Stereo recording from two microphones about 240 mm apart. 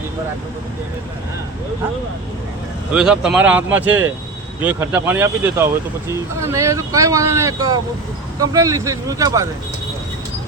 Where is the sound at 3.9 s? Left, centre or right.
Right.